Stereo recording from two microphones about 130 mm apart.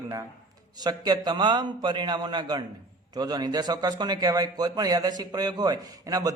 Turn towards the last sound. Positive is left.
turn(degrees=-30)  # may be behind; listen again after turning